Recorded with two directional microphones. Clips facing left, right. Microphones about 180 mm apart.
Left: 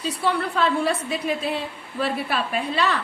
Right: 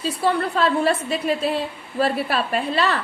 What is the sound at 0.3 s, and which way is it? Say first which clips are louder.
Speech: right 2 dB; 45° right (ahead or behind).